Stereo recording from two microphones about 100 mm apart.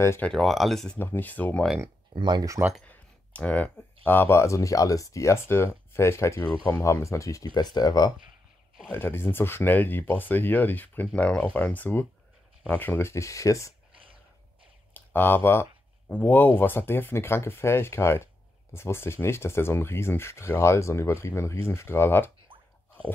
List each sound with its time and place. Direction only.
0.2 s speech: 5° left (ahead or behind)
0.9 s speech: 20° left (ahead or behind)
2.1 s speech: 50° right (ahead or behind)
2.8 s speech: 15° left (ahead or behind); by 7.4 s 30° left (ahead or behind)
7.5 s speech: 45° left (ahead or behind)
8.9 s speech: 25° left (ahead or behind)
15.0 s speech: 20° left (ahead or behind)